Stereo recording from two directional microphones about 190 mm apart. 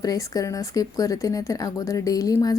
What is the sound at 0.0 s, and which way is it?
A woman's voice, 20° left (ahead or behind).